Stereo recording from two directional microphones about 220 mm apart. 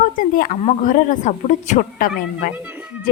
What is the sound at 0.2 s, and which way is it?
A woman's voice, 40° left (ahead or behind).